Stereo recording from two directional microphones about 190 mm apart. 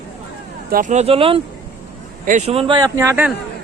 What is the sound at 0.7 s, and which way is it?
Speech, 40° right (ahead or behind).